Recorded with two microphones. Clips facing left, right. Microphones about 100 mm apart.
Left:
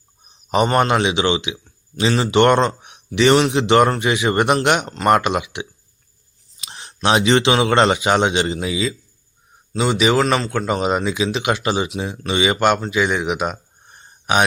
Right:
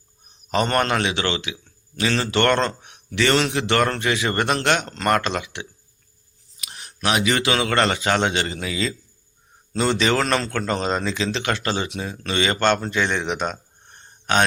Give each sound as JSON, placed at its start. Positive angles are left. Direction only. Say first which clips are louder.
{"t": 0.4, "sound": "a man's voice", "louder": "left 4 dB", "side_deg": 15}
{"t": 6.6, "sound": "a man's voice", "louder": "left 5 dB", "side_deg": 25}